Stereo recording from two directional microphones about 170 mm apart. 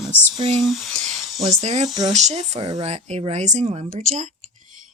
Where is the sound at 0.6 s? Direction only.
Centre (ahead or behind).